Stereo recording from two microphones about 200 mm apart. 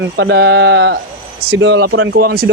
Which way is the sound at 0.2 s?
60° right (ahead or behind).